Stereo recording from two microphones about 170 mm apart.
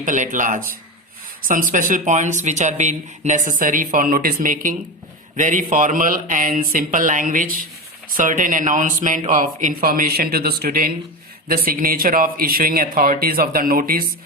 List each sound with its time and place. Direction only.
0.0 s speech: 50° right (ahead or behind)